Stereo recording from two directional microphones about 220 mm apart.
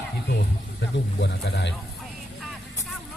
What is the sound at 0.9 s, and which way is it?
Speech, 50° left (ahead or behind).